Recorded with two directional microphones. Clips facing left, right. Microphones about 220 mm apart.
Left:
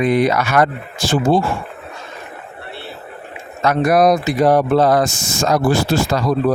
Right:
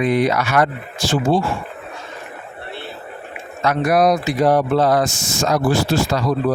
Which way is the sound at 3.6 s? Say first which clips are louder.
Left 2 dB; 50° left (ahead or behind).